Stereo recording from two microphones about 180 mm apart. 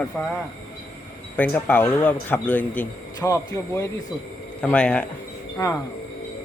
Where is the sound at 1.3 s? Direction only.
10° left (ahead or behind).